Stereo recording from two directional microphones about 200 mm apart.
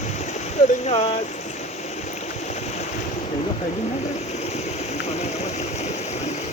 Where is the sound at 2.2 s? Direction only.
35° left (ahead or behind).